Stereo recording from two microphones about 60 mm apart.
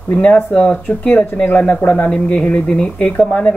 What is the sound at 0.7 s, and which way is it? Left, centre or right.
A man's voice, left.